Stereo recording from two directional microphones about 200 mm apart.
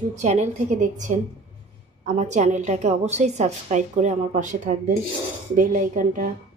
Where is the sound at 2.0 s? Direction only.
35° right (ahead or behind).